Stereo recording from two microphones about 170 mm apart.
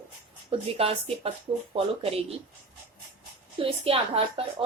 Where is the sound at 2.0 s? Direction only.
35° right (ahead or behind).